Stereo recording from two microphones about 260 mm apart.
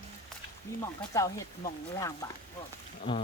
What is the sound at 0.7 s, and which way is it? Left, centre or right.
Speech, centre.